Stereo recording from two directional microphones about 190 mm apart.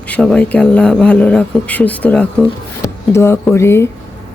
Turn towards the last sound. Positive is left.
turn(degrees=15)  # may be behind; listen again after turning